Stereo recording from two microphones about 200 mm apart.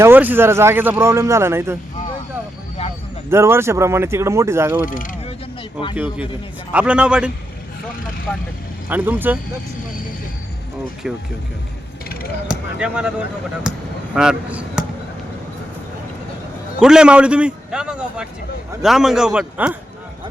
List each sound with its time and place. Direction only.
0.0 s speech: 10° right (ahead or behind)
2.8 s a sound: 30° left (ahead or behind)
3.2 s speech: 10° right (ahead or behind)
4.9 s speech: 40° left (ahead or behind)
6.7 s a man's voice: 5° right (ahead or behind)
8.9 s speech: 10° right (ahead or behind)
12.5 s a man's voice: 5° right (ahead or behind)
16.8 s a man's voice: 5° right (ahead or behind)